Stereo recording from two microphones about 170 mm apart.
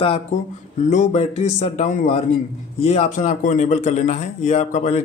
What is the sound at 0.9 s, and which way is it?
A man's voice, 45° left (ahead or behind).